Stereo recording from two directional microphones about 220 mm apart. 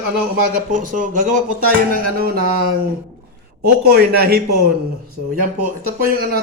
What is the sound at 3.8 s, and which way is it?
Speech, 45° right (ahead or behind).